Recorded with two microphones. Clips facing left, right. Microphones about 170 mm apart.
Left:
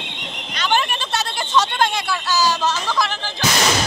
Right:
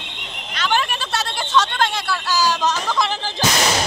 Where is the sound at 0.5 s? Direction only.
Centre (ahead or behind).